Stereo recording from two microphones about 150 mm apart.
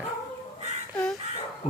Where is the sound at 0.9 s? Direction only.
5° left (ahead or behind).